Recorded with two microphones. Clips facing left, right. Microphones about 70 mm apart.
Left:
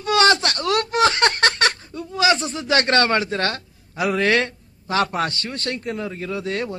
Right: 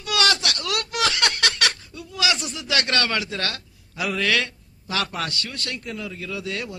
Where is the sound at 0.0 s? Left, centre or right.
Left.